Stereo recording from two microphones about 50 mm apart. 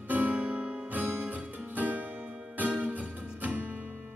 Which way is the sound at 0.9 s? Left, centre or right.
Right.